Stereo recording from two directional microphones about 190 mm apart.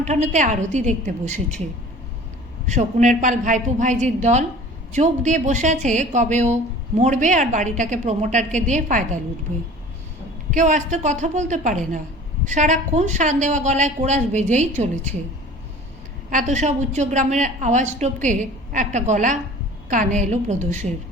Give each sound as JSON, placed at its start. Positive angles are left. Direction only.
{"t": 0.0, "sound": "a woman's voice", "side_deg": -35}
{"t": 2.6, "sound": "a woman's voice", "side_deg": -40}
{"t": 10.5, "sound": "a woman's voice", "side_deg": -40}
{"t": 16.3, "sound": "a woman's voice", "side_deg": -40}